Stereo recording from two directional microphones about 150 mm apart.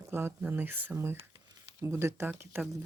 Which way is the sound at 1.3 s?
30° right (ahead or behind).